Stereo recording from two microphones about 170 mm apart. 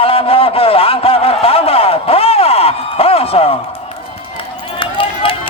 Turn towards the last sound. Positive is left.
turn(degrees=30)  # may be behind; listen again after turning